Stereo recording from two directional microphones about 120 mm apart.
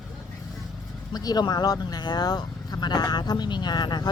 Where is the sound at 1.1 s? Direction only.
35° left (ahead or behind).